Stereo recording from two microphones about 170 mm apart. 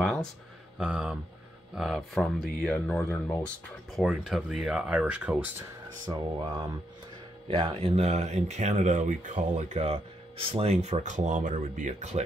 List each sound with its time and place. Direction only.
0.0 s a sound: 5° left (ahead or behind)
0.7 s speech: 5° right (ahead or behind)
3.9 s speech: centre (ahead or behind)
6.0 s speech: 25° right (ahead or behind); by 12.2 s 45° right (ahead or behind)